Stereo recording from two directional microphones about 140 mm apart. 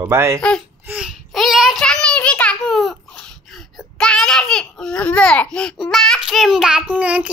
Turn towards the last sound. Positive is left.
turn(degrees=-10)  # may be behind; listen again after turning